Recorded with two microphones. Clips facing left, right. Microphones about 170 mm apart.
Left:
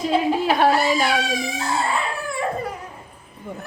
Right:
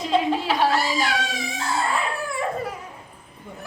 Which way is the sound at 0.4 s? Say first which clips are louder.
Left 4 dB; 55° left (ahead or behind).